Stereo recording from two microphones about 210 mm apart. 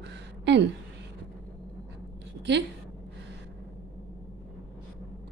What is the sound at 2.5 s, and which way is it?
Speech, 55° right (ahead or behind).